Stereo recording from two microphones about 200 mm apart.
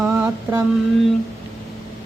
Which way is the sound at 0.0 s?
10° right (ahead or behind).